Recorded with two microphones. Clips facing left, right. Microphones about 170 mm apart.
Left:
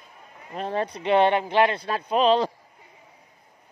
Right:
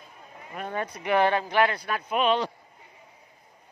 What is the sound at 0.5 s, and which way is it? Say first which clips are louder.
Speech: left 5 dB; 30° left (ahead or behind).